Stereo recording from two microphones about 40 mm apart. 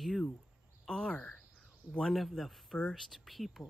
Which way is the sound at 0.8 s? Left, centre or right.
Centre.